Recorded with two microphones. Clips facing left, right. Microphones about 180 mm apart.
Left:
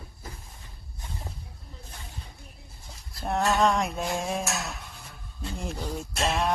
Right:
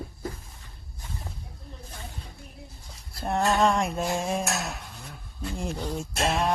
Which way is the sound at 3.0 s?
Centre (ahead or behind).